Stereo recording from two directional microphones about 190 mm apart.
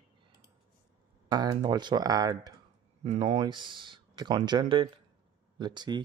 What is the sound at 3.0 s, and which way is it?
Speech, 30° right (ahead or behind).